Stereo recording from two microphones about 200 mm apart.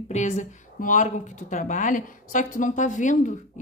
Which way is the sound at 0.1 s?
35° left (ahead or behind).